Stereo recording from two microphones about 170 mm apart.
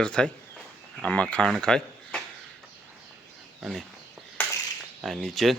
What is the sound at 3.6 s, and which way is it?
Speech, centre (ahead or behind).